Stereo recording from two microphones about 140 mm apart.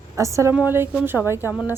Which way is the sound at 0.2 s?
20° right (ahead or behind).